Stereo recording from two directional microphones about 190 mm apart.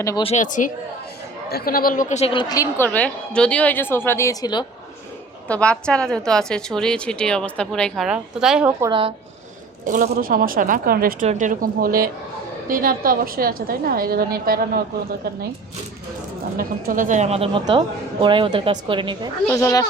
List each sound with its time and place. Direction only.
0.2 s speech: 35° left (ahead or behind)
1.5 s speech: 55° left (ahead or behind); by 4.6 s 20° left (ahead or behind)
5.5 s a woman's voice: 5° left (ahead or behind)
8.9 s speech: 30° right (ahead or behind)
9.8 s a woman's voice: 45° right (ahead or behind)
16.6 s speech: 50° right (ahead or behind); by 19.3 s 25° right (ahead or behind)
19.5 s speech: 15° left (ahead or behind)